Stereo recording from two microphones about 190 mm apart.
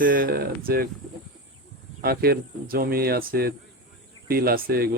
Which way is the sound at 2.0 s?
55° right (ahead or behind).